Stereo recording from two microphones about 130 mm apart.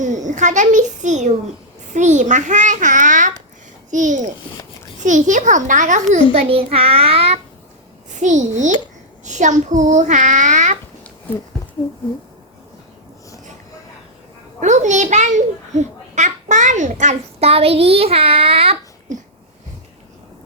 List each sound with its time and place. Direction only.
0.0 s a child's voice: 70° right (ahead or behind)
6.3 s a child's voice: 50° right (ahead or behind)
8.2 s a child's voice: 70° right (ahead or behind)
14.6 s a child's voice: 65° right (ahead or behind); by 18.8 s 45° right (ahead or behind)
19.1 s wheeze: 75° right (ahead or behind)